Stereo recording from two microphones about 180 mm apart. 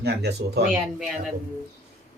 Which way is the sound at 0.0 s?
65° right (ahead or behind).